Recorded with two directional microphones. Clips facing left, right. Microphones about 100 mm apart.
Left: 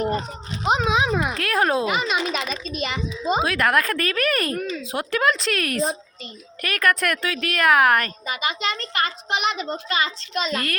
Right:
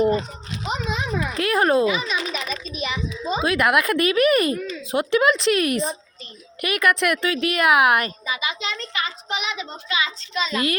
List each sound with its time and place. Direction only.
0.7 s a sound: 85° left; by 1.4 s 70° left (ahead or behind)
1.4 s speech: 5° right (ahead or behind)
1.9 s a child's voice: 65° left (ahead or behind)
3.4 s speech: 5° right (ahead or behind)
4.5 s speech: 60° left (ahead or behind)
4.9 s speech: 5° right (ahead or behind)
8.3 s a child's voice: 50° left (ahead or behind)